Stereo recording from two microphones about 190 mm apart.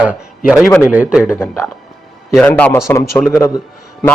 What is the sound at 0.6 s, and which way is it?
Speech, 10° left (ahead or behind).